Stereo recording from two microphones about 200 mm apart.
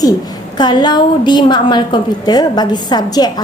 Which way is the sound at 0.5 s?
20° left (ahead or behind).